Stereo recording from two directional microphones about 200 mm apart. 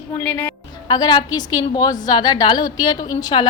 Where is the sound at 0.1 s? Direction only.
10° left (ahead or behind).